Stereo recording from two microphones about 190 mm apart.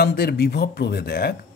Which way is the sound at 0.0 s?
55° left (ahead or behind).